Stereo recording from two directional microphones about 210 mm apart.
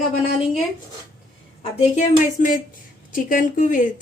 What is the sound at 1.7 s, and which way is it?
Speech, 35° left (ahead or behind).